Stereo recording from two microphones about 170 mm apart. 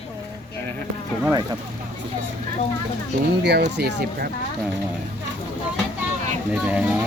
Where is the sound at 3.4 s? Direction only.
80° right.